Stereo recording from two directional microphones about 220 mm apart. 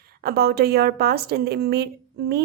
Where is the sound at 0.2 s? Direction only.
45° right (ahead or behind).